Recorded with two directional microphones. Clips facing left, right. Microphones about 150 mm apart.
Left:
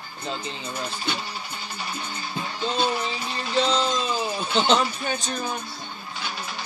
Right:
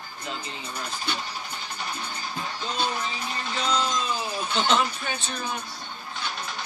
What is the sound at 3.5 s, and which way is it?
Speech, 30° left (ahead or behind).